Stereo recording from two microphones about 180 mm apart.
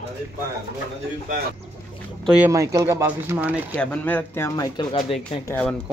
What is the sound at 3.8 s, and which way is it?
Speech, 10° left (ahead or behind).